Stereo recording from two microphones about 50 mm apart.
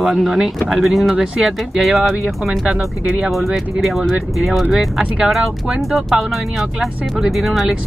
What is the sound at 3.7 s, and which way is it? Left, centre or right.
Speech, centre.